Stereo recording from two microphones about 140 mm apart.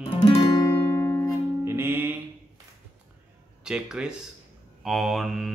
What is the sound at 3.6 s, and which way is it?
Mantra, 5° right (ahead or behind).